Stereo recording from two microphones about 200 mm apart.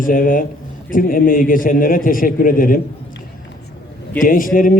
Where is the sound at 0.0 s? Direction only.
45° left (ahead or behind).